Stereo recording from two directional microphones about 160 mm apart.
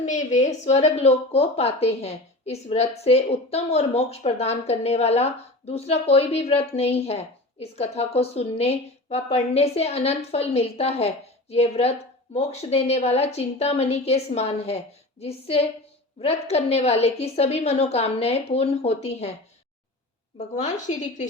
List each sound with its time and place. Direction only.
0.1 s a woman's voice: 50° left (ahead or behind)
20.6 s a woman's voice: 45° left (ahead or behind)